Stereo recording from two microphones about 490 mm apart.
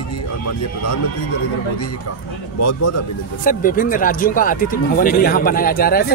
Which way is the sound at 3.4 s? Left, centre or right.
Centre.